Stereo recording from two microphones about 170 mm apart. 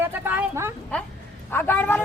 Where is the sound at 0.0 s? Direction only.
10° right (ahead or behind).